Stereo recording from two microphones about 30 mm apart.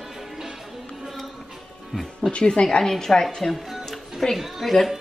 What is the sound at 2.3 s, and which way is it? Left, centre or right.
Speech, left.